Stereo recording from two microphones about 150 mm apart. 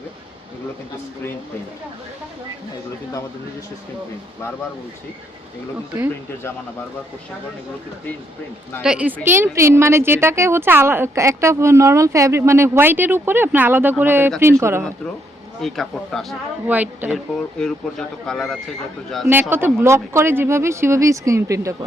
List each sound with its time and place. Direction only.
8.8 s a woman's voice: 5° right (ahead or behind)
15.6 s speech: centre (ahead or behind)
16.6 s a woman's voice: 10° right (ahead or behind)
17.3 s speech: 5° left (ahead or behind)
19.3 s a woman's voice: 15° right (ahead or behind)